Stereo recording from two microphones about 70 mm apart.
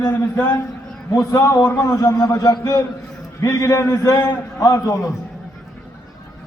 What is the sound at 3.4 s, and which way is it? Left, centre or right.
A man's voice, left.